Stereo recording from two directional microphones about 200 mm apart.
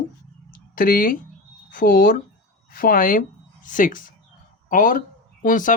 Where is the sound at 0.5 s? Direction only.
45° left (ahead or behind).